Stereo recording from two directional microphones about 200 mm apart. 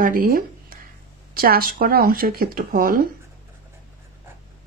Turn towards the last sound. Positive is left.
turn(degrees=-45)  # may be behind; listen again after turning